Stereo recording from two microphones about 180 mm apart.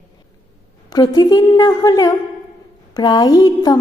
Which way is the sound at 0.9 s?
20° left (ahead or behind).